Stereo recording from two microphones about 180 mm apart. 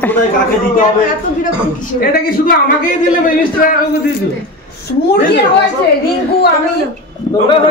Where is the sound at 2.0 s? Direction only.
55° left (ahead or behind).